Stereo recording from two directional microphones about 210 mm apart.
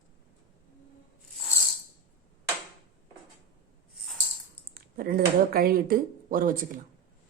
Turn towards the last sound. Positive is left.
turn(degrees=-40)  # may be behind; listen again after turning